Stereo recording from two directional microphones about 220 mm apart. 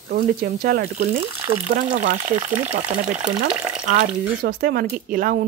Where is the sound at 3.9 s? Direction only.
40° right (ahead or behind).